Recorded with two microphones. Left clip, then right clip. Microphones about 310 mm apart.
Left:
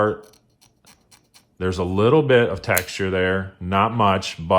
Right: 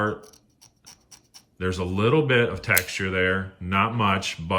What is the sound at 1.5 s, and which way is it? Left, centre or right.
Speech, centre.